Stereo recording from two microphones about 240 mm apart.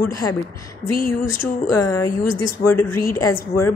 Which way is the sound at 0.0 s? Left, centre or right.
Centre.